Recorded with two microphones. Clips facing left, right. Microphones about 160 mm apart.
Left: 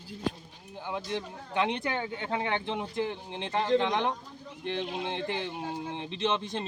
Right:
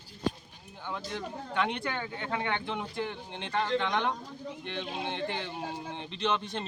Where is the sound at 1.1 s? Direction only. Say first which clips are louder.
Left 1 dB; 20° left (ahead or behind).